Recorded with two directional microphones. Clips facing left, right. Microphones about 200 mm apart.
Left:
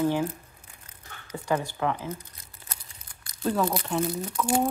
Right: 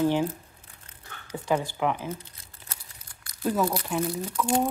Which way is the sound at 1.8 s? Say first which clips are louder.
Right 1 dB; 15° right (ahead or behind).